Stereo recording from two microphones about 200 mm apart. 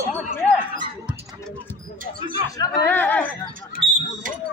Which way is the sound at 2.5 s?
15° left (ahead or behind).